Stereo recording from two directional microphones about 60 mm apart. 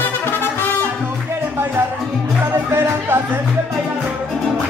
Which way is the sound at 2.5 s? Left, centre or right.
Right.